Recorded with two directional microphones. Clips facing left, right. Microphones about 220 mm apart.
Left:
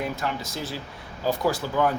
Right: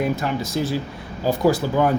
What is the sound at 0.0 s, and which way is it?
Speech, 10° right (ahead or behind).